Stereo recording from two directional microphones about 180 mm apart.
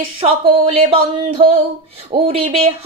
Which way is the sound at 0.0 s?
30° right (ahead or behind).